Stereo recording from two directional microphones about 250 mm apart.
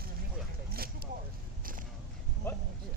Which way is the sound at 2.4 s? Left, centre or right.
Centre.